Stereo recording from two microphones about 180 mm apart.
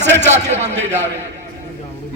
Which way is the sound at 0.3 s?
40° right (ahead or behind).